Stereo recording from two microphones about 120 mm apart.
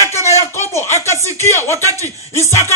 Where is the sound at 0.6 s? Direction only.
20° left (ahead or behind).